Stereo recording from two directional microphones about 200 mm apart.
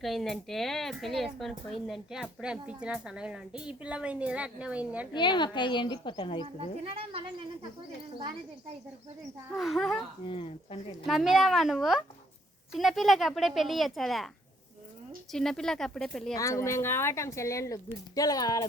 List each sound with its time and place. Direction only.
0.0 s speech: centre (ahead or behind)
5.1 s speech: 25° left (ahead or behind)
6.6 s speech: 30° right (ahead or behind)
9.6 s speech: centre (ahead or behind)
10.2 s speech: 25° left (ahead or behind)
11.0 s speech: centre (ahead or behind)
15.3 s speech: centre (ahead or behind)
16.4 s speech: 15° left (ahead or behind)